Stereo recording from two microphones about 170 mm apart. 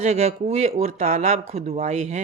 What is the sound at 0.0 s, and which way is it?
Speech, 40° right (ahead or behind).